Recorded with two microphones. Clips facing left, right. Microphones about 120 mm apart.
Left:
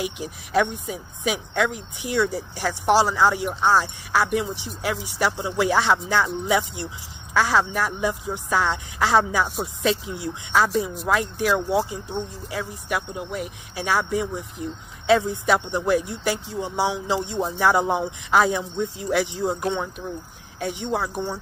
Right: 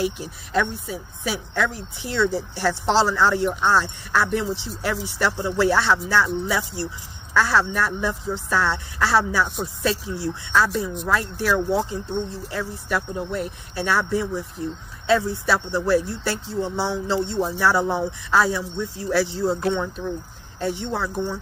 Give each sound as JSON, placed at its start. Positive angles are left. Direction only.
{"t": 0.0, "sound": "speech", "side_deg": 15}